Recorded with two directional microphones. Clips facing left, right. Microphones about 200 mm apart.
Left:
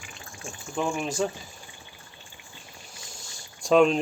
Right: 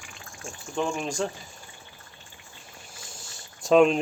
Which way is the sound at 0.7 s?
5° left (ahead or behind).